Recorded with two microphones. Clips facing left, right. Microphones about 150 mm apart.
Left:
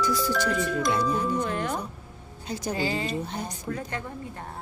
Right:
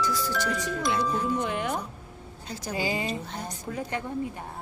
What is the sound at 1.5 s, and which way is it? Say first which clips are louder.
Music: even; 10° right (ahead or behind).